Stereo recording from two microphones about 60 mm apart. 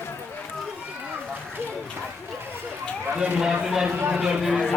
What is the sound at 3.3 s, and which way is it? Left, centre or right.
Speech, centre.